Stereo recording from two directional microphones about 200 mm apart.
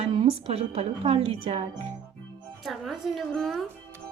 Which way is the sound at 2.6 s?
Centre (ahead or behind).